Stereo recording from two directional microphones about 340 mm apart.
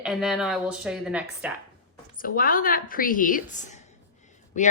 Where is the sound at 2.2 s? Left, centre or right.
Left.